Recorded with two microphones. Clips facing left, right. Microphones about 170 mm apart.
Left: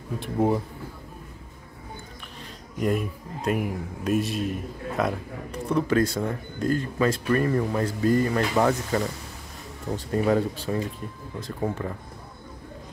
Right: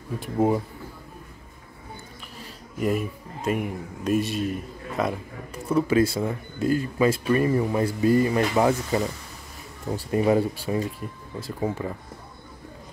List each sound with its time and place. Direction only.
0.2 s speech: 5° right (ahead or behind)
2.8 s speech: centre (ahead or behind)